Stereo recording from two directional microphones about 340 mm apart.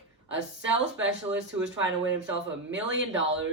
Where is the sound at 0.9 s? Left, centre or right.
Right.